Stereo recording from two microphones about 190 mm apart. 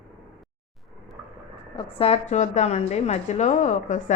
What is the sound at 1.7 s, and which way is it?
A woman's voice, 30° left (ahead or behind).